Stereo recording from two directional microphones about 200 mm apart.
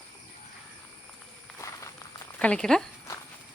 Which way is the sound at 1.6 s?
15° left (ahead or behind).